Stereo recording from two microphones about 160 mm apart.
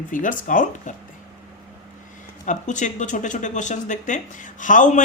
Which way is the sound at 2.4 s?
50° left (ahead or behind).